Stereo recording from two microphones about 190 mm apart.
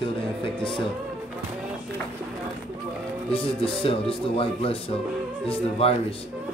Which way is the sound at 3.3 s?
30° left (ahead or behind).